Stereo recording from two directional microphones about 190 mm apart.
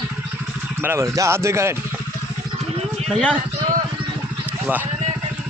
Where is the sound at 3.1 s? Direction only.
5° left (ahead or behind).